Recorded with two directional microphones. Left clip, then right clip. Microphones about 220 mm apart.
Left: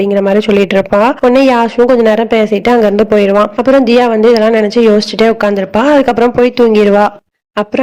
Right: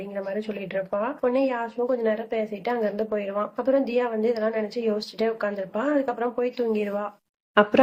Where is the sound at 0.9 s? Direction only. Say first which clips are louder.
Left 16 dB; 45° left (ahead or behind).